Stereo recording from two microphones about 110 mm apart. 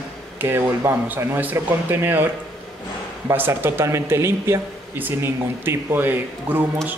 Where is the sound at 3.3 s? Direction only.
20° right (ahead or behind).